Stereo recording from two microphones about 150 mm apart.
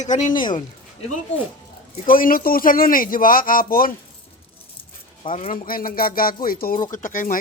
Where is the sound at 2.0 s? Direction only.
70° left (ahead or behind).